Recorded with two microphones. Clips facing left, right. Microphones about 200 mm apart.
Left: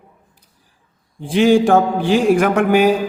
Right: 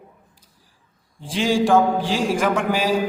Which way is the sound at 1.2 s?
60° left (ahead or behind).